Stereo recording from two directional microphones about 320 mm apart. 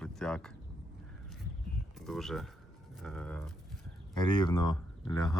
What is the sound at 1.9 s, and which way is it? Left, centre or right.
Speech, centre.